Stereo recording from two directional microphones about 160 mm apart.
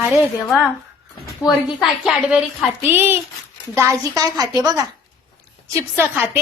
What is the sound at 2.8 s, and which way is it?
A woman's voice, 15° right (ahead or behind).